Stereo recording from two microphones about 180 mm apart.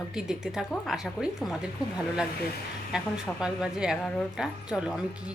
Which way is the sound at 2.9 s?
5° right (ahead or behind).